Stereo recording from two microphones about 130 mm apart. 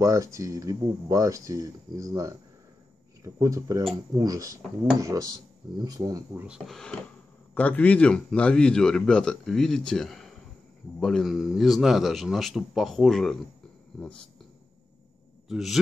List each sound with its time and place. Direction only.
0.0 s speech: 25° right (ahead or behind)
6.4 s a man's voice: 5° right (ahead or behind)
15.4 s speech: 5° right (ahead or behind)